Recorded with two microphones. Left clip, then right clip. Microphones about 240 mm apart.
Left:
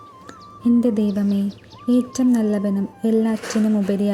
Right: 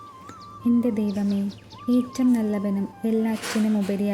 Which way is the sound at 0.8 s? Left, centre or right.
Centre.